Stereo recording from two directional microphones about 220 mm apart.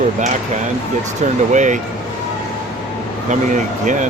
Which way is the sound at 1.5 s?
35° right (ahead or behind).